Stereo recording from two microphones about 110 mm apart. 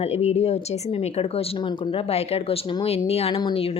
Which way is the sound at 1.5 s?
50° left (ahead or behind).